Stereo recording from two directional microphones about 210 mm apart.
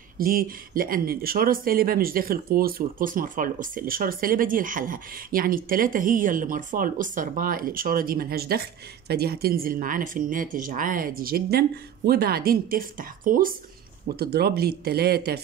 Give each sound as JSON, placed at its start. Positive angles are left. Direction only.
{"t": 0.2, "sound": "speech", "side_deg": -45}